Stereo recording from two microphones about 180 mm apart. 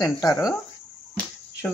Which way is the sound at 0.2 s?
Centre (ahead or behind).